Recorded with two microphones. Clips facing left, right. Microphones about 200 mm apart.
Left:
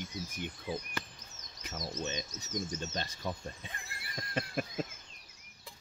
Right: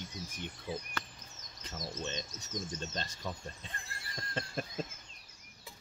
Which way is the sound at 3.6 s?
15° left (ahead or behind).